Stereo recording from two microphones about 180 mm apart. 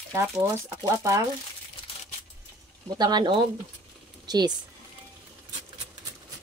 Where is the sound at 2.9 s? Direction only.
25° right (ahead or behind).